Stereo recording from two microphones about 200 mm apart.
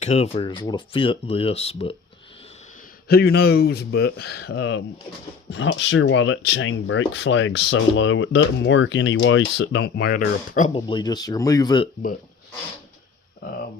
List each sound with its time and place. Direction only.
0.0 s speech: 30° left (ahead or behind)
3.1 s speech: 50° left (ahead or behind); by 9.4 s 70° left (ahead or behind)
9.6 s speech: 55° left (ahead or behind); by 10.8 s 40° left (ahead or behind)
10.8 s speech: 20° left (ahead or behind)
13.4 s speech: 45° left (ahead or behind)